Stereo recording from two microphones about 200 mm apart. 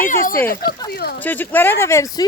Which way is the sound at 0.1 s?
45° left (ahead or behind).